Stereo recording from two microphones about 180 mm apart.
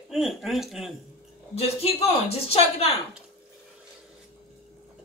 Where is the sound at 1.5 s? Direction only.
35° left (ahead or behind).